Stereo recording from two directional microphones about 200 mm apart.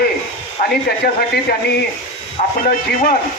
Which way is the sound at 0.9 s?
50° left (ahead or behind).